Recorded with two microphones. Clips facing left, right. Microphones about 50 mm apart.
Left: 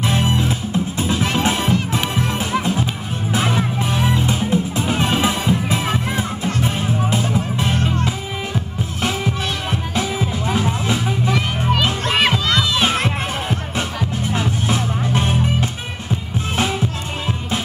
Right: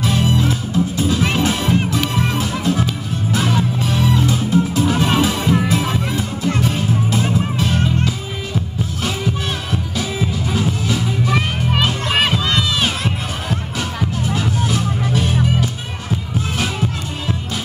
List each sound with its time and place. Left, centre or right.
0.0 s music: left
9.7 s music: left
12.5 s music: left